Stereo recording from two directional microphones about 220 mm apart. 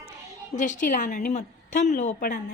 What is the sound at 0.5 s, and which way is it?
A woman's voice, 35° left (ahead or behind).